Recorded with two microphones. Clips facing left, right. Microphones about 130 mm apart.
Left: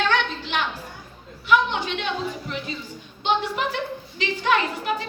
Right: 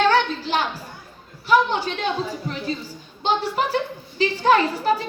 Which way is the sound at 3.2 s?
35° right (ahead or behind).